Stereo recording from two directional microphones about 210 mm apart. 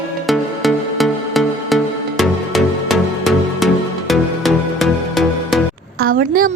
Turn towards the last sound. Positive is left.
turn(degrees=-40)  # may be behind; listen again after turning